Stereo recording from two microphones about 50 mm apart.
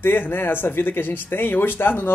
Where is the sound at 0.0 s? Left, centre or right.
Left.